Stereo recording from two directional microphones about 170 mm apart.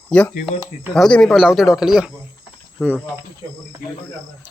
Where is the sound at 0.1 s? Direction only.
10° left (ahead or behind); by 3.0 s 10° right (ahead or behind).